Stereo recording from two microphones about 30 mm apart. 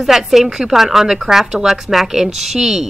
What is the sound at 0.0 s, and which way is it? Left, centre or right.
Speech, centre.